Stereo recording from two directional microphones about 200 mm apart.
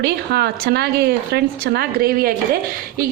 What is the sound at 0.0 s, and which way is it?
Speech, 55° right (ahead or behind).